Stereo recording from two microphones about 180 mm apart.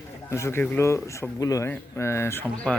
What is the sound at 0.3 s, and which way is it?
Speech, 15° left (ahead or behind).